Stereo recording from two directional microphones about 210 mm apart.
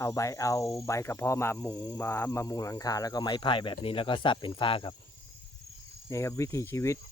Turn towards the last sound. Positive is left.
turn(degrees=15)  # may be behind; listen again after turning